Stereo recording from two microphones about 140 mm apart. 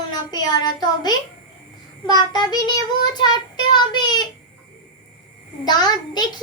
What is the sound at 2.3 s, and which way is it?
Speech, 30° left (ahead or behind).